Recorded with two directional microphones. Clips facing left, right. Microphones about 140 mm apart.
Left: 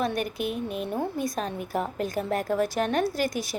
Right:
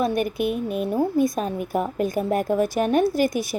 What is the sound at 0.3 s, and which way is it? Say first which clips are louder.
A woman's voice: right 6 dB; 50° right (ahead or behind).